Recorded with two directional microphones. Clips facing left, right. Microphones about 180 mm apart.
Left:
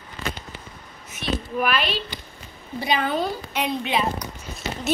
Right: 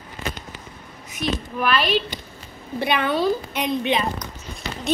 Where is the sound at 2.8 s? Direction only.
65° right (ahead or behind).